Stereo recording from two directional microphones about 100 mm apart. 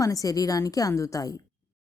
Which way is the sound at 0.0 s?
35° left (ahead or behind).